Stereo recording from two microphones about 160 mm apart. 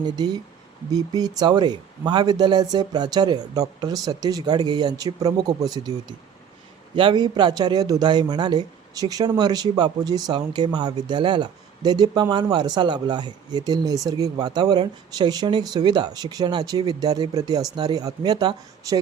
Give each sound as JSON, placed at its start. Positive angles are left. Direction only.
{"t": 0.0, "sound": "speech", "side_deg": -25}